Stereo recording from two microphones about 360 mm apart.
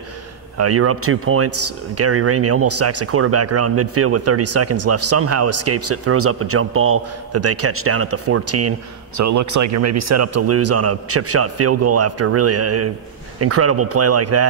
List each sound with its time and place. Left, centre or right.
0.6 s speech: right